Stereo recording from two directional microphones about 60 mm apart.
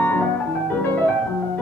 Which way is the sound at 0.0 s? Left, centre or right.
Left.